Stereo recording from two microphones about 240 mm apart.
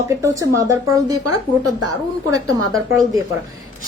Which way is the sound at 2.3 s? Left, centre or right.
Right.